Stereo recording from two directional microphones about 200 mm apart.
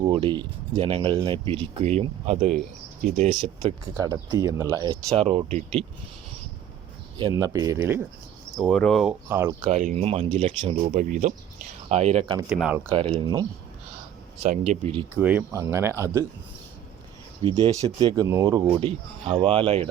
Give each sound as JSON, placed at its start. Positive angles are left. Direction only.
{"t": 0.0, "sound": "speech", "side_deg": -25}
{"t": 3.4, "sound": "speech", "side_deg": -25}
{"t": 7.2, "sound": "speech", "side_deg": -20}
{"t": 8.6, "sound": "speech", "side_deg": 5}
{"t": 9.6, "sound": "speech", "side_deg": -35}
{"t": 10.8, "sound": "speech", "side_deg": -40}
{"t": 12.5, "sound": "speech", "side_deg": -5}
{"t": 12.9, "sound": "speech", "side_deg": -25}
{"t": 14.7, "sound": "speech", "side_deg": -30}
{"t": 15.1, "sound": "speech", "side_deg": -10}
{"t": 17.4, "sound": "speech", "side_deg": -30}
{"t": 17.8, "sound": "speech", "side_deg": -20}